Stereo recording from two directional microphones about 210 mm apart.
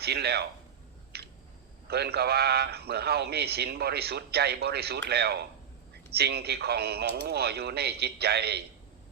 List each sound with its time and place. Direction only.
0.0 s a man's voice: 50° right (ahead or behind)
1.1 s a sound: 50° right (ahead or behind)
1.9 s a man's voice: 50° right (ahead or behind)